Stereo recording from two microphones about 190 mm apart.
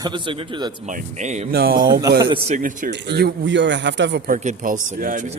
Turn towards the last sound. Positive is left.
turn(degrees=-45)  # may be behind; listen again after turning